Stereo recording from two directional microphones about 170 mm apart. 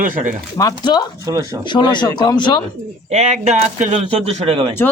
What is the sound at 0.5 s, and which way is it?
Speech, 25° left (ahead or behind).